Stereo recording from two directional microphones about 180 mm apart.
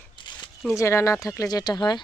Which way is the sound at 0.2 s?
25° left (ahead or behind).